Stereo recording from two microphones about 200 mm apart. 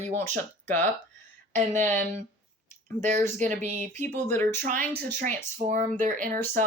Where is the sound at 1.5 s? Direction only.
35° right (ahead or behind).